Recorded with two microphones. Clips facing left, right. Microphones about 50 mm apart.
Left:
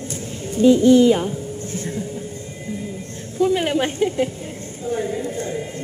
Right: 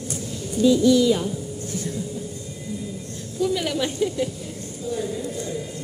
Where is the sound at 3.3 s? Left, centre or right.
Left.